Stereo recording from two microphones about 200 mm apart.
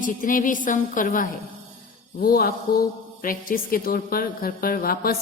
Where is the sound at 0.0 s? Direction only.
45° left (ahead or behind).